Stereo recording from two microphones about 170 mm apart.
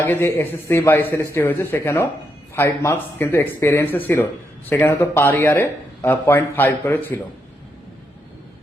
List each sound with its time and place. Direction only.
0.0 s speech: 15° left (ahead or behind)